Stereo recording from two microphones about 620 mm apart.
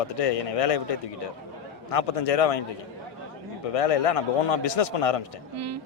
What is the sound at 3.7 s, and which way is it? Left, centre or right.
A man's voice, left.